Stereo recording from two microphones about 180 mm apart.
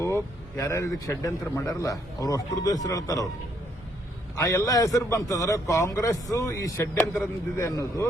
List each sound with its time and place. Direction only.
0.0 s speech: 15° left (ahead or behind)
4.4 s a man's voice: 20° left (ahead or behind)